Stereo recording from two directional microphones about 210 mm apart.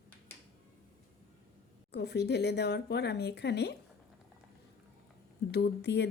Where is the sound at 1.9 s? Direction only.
50° left (ahead or behind).